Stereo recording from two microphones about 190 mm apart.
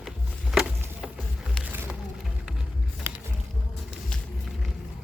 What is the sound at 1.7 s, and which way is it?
Music, 10° right (ahead or behind).